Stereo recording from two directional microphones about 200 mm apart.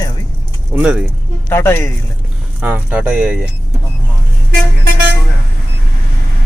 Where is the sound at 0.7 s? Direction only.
5° right (ahead or behind).